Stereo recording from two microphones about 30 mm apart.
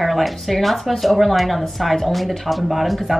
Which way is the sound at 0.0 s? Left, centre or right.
Centre.